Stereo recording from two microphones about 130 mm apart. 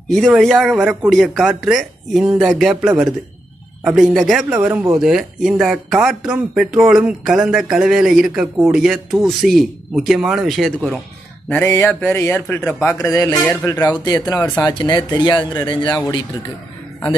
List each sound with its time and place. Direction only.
0.1 s speech: centre (ahead or behind)
11.4 s speech: 15° left (ahead or behind)
14.6 s speech: 35° left (ahead or behind)